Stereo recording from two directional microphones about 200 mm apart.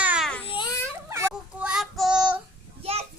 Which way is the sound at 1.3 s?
5° right (ahead or behind).